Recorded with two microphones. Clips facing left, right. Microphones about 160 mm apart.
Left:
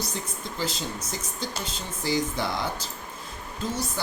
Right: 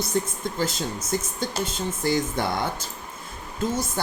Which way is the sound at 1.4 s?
50° right (ahead or behind).